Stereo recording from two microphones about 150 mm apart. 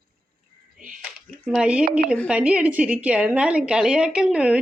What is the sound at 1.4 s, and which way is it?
A woman's voice, 5° right (ahead or behind).